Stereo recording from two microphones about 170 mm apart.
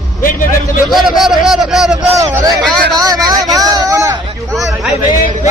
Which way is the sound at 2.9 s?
25° right (ahead or behind).